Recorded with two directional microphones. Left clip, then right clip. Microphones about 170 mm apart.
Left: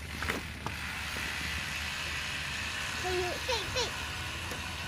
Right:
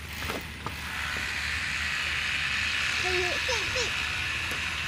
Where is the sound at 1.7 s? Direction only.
30° left (ahead or behind).